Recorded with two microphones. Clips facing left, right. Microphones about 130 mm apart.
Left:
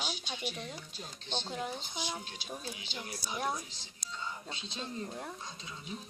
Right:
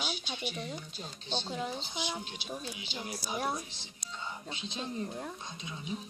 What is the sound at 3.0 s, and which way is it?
Speech, 20° right (ahead or behind).